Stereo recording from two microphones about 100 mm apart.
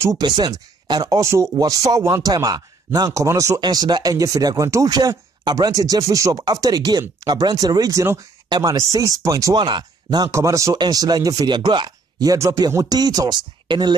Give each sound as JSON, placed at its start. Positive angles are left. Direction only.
{"t": 0.2, "sound": "speech", "side_deg": -45}
{"t": 3.6, "sound": "speech", "side_deg": -45}
{"t": 10.3, "sound": "speech", "side_deg": -30}
{"t": 10.8, "sound": "speech", "side_deg": -40}